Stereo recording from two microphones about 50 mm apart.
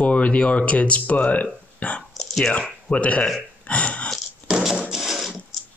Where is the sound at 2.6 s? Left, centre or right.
Left.